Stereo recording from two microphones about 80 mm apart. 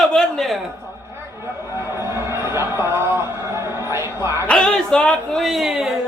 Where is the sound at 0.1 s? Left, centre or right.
Centre.